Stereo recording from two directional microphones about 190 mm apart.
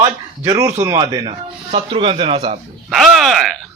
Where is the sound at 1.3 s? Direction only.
30° right (ahead or behind).